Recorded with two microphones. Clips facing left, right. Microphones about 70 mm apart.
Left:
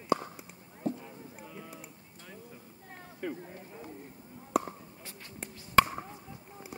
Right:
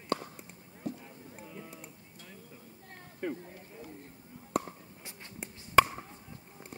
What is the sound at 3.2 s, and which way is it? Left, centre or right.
Speech, centre.